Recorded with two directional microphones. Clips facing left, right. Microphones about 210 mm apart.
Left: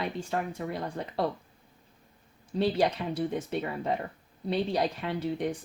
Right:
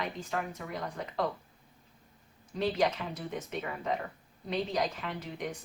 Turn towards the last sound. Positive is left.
turn(degrees=30)  # may be behind; listen again after turning